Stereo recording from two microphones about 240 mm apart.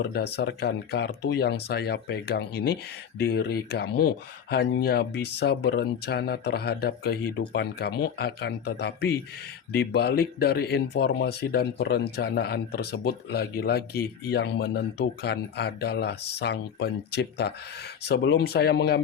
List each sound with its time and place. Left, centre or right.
0.0 s speech: left